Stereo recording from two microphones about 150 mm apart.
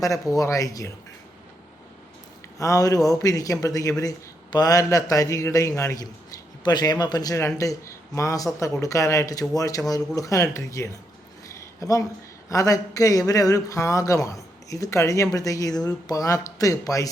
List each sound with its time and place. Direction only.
0.0 s speech: 20° left (ahead or behind)
2.6 s speech: 20° left (ahead or behind)
11.4 s a sound: 20° left (ahead or behind)
12.5 s speech: 20° left (ahead or behind)